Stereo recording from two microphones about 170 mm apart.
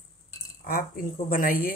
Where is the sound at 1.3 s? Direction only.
55° left (ahead or behind).